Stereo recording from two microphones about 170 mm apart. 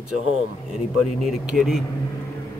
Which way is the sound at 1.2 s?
Centre (ahead or behind).